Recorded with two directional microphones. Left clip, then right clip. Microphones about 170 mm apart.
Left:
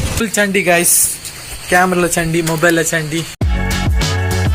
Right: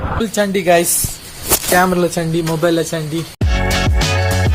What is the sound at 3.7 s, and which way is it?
Music, centre (ahead or behind).